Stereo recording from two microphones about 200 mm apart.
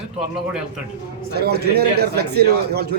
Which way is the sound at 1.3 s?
55° right (ahead or behind).